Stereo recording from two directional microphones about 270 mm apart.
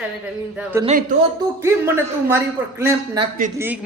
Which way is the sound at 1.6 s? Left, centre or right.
Centre.